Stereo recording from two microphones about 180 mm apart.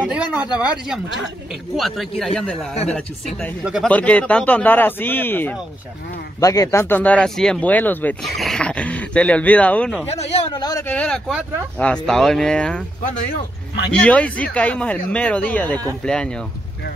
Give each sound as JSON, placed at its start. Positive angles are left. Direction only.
{"t": 0.0, "sound": "a sound", "side_deg": -5}
{"t": 0.6, "sound": "speech", "side_deg": -5}
{"t": 10.1, "sound": "a man's voice", "side_deg": 35}
{"t": 10.5, "sound": "speech", "side_deg": 20}
{"t": 13.9, "sound": "speech", "side_deg": 5}